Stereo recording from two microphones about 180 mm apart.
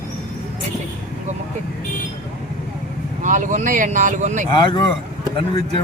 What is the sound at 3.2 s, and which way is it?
Speech, 45° right (ahead or behind).